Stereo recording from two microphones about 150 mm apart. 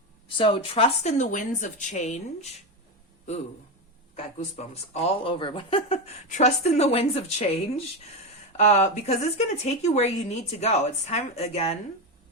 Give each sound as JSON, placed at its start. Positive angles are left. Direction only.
{"t": 0.3, "sound": "speech", "side_deg": 35}